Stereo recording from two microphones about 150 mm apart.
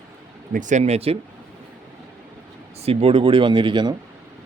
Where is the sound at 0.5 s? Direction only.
55° right (ahead or behind).